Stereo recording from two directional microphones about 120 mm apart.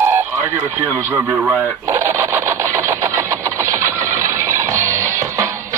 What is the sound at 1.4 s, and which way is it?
Sewing machine, 20° right (ahead or behind).